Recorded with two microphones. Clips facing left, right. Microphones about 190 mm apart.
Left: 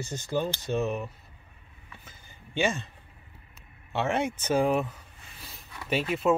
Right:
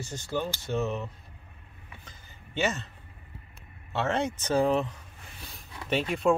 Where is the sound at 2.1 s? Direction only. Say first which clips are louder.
Even; 10° left (ahead or behind).